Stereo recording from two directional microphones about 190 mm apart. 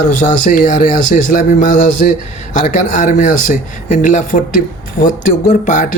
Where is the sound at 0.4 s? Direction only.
45° left (ahead or behind).